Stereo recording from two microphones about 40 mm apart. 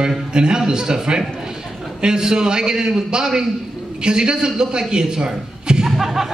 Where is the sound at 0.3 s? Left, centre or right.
Right.